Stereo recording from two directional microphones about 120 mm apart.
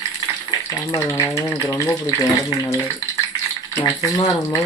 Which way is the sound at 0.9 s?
20° left (ahead or behind).